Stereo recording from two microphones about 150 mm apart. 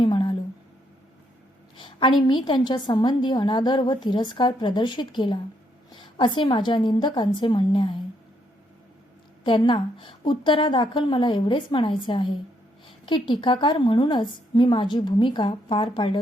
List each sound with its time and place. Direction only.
0.0 s a sound: 35° left (ahead or behind)
1.7 s a woman's voice: 35° left (ahead or behind)
9.4 s a woman's voice: 35° left (ahead or behind)